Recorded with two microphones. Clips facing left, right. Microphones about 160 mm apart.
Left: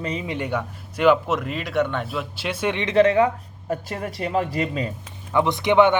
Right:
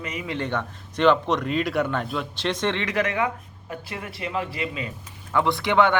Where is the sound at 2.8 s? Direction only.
30° left (ahead or behind).